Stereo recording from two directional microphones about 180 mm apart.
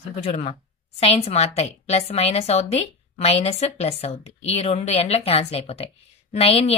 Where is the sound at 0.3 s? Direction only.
35° left (ahead or behind).